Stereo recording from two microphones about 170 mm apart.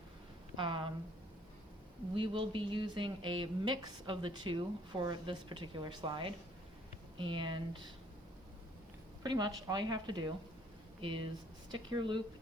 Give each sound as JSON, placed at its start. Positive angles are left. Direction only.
{"t": 0.5, "sound": "speech", "side_deg": -30}
{"t": 2.1, "sound": "speech", "side_deg": -30}
{"t": 9.2, "sound": "speech", "side_deg": -25}